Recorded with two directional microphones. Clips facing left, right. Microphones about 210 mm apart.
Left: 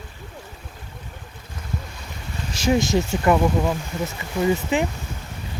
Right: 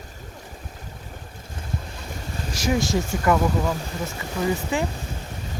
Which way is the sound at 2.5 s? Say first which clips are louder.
Left 3 dB; 25° left (ahead or behind).